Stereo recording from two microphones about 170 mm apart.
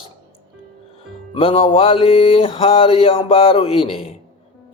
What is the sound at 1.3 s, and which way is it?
Speech, 30° left (ahead or behind).